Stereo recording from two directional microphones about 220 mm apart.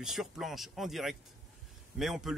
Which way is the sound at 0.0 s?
Centre (ahead or behind).